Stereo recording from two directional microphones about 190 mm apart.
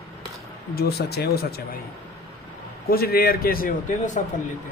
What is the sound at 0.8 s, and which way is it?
Speech, 55° left (ahead or behind).